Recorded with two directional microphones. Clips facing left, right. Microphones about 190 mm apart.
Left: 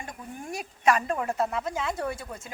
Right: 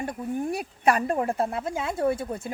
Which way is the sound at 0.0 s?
35° right (ahead or behind).